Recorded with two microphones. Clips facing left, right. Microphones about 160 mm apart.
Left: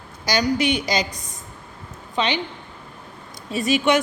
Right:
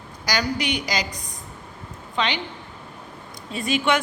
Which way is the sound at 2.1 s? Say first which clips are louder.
Left 2 dB; 20° left (ahead or behind).